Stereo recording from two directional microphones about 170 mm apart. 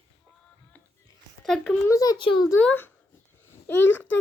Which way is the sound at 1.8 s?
20° left (ahead or behind).